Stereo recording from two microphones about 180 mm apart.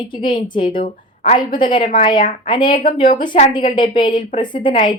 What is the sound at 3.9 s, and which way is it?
A woman's voice, 25° left (ahead or behind).